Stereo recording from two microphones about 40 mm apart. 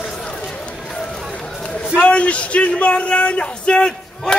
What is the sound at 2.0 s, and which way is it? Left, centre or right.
Speech, left.